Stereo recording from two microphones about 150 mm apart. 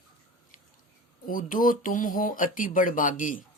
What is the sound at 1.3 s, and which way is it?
Speech, 65° left (ahead or behind).